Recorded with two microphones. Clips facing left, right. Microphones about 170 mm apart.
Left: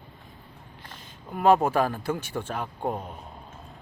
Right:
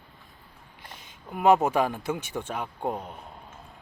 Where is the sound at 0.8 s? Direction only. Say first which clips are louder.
Even; 15° right (ahead or behind).